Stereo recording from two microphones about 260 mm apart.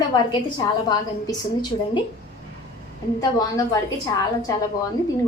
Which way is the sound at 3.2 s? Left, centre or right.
Centre.